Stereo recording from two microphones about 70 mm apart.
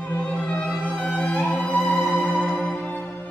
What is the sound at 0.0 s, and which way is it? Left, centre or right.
Music, centre.